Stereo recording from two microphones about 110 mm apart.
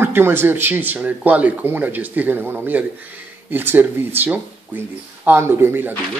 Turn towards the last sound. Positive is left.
turn(degrees=-20)  # may be behind; listen again after turning